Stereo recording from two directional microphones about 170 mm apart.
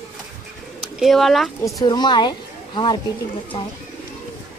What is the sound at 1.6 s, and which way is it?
A woman's voice, 25° left (ahead or behind).